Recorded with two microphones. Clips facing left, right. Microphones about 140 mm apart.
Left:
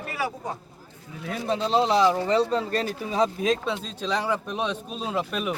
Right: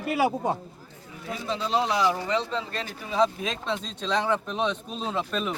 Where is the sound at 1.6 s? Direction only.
30° left (ahead or behind).